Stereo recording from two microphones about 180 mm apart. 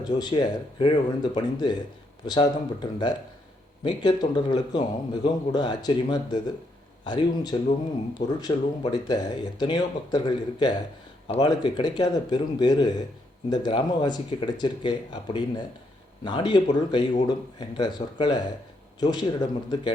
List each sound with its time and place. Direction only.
0.2 s speech: 20° left (ahead or behind)